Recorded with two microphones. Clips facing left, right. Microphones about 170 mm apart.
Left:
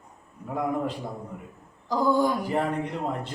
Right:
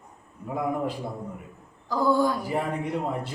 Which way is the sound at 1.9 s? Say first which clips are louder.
Even; 15° left (ahead or behind).